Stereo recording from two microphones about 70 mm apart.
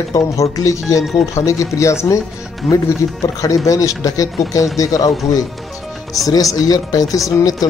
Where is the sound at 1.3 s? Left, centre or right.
Left.